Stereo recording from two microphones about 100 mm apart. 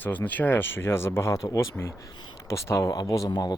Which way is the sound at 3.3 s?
45° left (ahead or behind).